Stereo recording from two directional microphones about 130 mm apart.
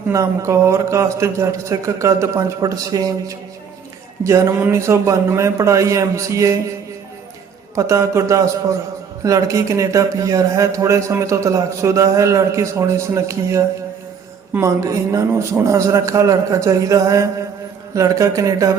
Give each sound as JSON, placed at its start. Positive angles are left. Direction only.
{"t": 0.1, "sound": "a man's voice", "side_deg": -25}
{"t": 7.8, "sound": "a man's voice", "side_deg": -25}